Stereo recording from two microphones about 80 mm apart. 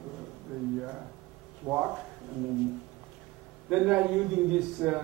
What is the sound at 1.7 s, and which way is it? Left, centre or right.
Speech, right.